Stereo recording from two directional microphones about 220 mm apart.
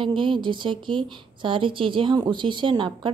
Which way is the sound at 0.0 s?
20° right (ahead or behind).